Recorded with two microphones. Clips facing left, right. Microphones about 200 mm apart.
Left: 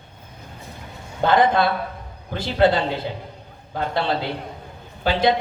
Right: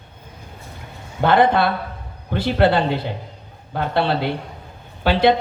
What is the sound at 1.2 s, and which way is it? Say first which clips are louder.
Speech: right 2 dB; 60° right (ahead or behind).